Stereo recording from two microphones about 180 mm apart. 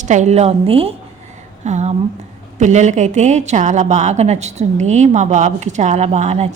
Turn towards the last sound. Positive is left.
turn(degrees=-40)  # may be behind; listen again after turning